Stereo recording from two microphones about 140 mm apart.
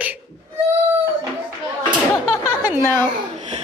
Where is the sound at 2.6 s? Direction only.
15° right (ahead or behind).